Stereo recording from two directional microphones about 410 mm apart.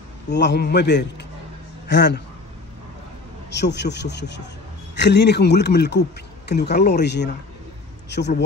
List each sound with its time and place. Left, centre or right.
0.3 s speech: left
3.4 s speech: left